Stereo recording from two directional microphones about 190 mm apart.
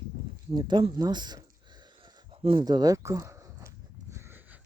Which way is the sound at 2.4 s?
25° right (ahead or behind).